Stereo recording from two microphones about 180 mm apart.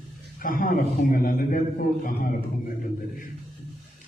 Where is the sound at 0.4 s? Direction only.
50° left (ahead or behind).